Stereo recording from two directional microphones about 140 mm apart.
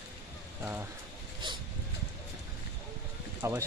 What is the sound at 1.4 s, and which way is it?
Speech, 35° right (ahead or behind).